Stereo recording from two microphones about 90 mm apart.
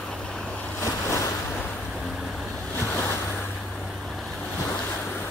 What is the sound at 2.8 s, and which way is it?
Ocean, 25° left (ahead or behind).